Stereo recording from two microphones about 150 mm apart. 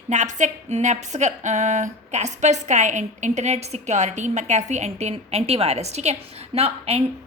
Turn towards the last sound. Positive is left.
turn(degrees=-45)  # may be behind; listen again after turning